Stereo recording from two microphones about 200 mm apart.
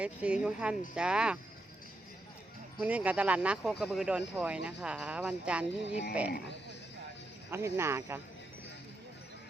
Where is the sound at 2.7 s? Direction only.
5° right (ahead or behind).